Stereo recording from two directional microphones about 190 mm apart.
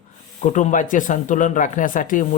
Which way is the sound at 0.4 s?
40° left (ahead or behind).